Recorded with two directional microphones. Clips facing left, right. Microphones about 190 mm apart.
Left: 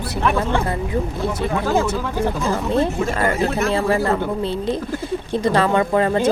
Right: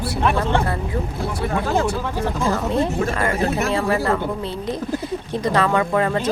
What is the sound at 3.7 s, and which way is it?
Speech, 30° left (ahead or behind).